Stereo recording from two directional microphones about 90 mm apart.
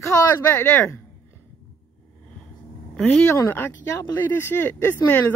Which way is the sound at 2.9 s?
10° left (ahead or behind).